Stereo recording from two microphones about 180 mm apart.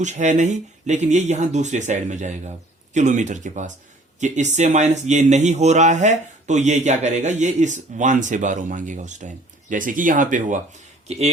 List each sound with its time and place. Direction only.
0.0 s speech: 40° right (ahead or behind)